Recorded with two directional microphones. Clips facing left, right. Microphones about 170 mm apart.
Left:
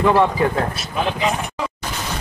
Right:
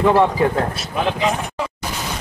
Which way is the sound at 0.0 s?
15° right (ahead or behind).